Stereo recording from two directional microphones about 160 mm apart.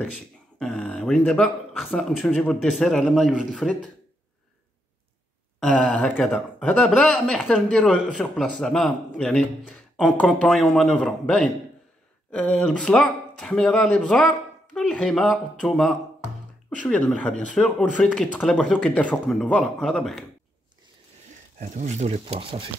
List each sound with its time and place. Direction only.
0.6 s speech: 5° left (ahead or behind)
5.6 s speech: 5° left (ahead or behind)
21.5 s speech: 50° right (ahead or behind); by 22.7 s 35° right (ahead or behind)